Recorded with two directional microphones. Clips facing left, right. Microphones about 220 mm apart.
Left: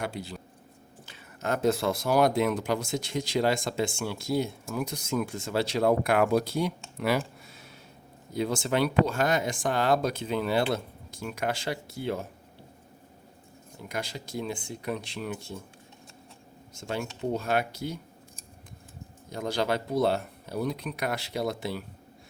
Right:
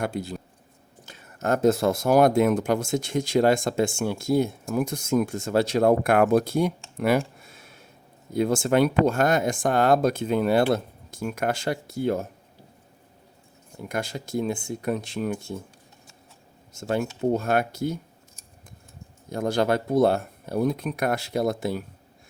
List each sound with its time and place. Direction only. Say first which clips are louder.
0.0 s speech: right 6 dB; 45° right (ahead or behind)
7.4 s a sound: even; 50° right (ahead or behind)
8.3 s speech: right 6 dB; 50° right (ahead or behind)
13.8 s speech: right 5 dB; 50° right (ahead or behind)
16.7 s speech: right 7 dB; 45° right (ahead or behind)
19.3 s speech: right 5 dB; 50° right (ahead or behind)